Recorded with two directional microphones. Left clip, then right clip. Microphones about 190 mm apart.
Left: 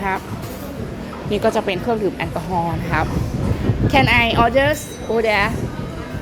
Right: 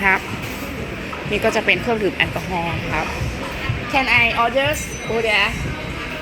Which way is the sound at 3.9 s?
40° left (ahead or behind).